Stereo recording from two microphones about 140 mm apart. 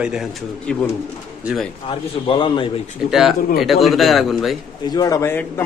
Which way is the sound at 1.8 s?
40° left (ahead or behind).